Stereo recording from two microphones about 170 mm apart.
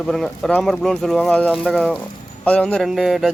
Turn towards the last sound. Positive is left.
turn(degrees=0)  # may be behind; listen again after turning